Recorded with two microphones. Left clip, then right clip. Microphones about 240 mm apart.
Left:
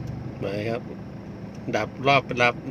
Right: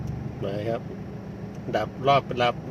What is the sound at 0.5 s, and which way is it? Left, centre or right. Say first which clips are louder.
Speech: even; left.